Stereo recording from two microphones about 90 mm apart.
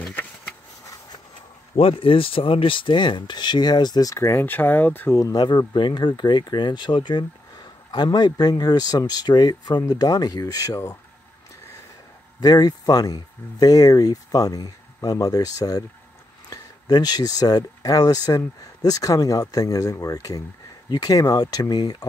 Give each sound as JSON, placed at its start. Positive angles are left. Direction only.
{"t": 0.0, "sound": "a sound", "side_deg": 20}
{"t": 1.8, "sound": "speech", "side_deg": 85}
{"t": 4.1, "sound": "speech", "side_deg": 30}
{"t": 5.1, "sound": "speech", "side_deg": 35}
{"t": 5.4, "sound": "speech", "side_deg": 55}
{"t": 12.4, "sound": "speech", "side_deg": 50}